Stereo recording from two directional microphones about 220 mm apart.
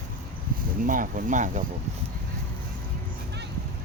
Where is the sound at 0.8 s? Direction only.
35° right (ahead or behind).